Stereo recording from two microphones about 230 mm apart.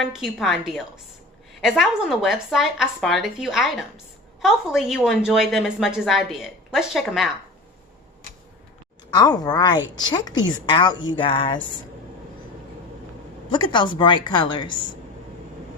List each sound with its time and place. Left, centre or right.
0.0 s a woman's voice: centre
9.0 s a woman's voice: centre
13.5 s a woman's voice: centre